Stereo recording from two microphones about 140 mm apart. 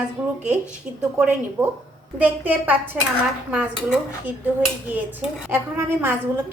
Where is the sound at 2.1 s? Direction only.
10° right (ahead or behind).